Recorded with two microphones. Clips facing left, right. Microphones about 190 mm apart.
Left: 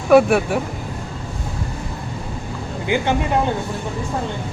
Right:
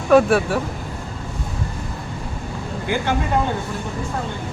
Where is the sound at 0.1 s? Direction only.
10° left (ahead or behind).